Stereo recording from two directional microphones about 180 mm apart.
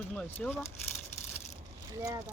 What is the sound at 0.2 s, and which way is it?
Speech, 10° left (ahead or behind).